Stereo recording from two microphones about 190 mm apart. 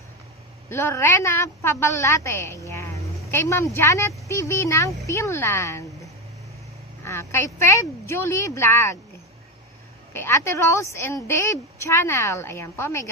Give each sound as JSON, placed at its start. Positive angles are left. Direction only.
{"t": 0.7, "sound": "a woman's voice", "side_deg": 15}
{"t": 7.0, "sound": "a woman's voice", "side_deg": 15}
{"t": 10.1, "sound": "a woman's voice", "side_deg": 15}